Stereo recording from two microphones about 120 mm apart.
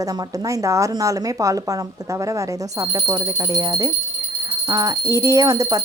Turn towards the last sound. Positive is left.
turn(degrees=-30)  # may be behind; listen again after turning